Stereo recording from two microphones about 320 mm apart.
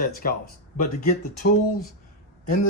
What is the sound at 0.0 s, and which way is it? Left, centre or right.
Speech, left.